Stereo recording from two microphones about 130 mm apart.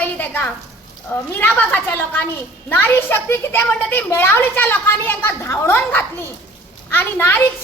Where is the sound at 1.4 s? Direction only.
15° left (ahead or behind).